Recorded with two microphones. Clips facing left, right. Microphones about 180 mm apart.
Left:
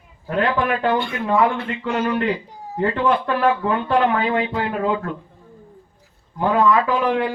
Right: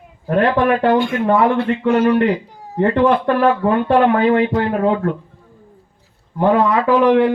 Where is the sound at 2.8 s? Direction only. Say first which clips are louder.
Right 5 dB; 65° right (ahead or behind).